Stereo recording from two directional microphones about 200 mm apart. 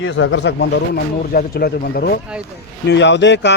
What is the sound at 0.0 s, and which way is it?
Speech, 75° left (ahead or behind).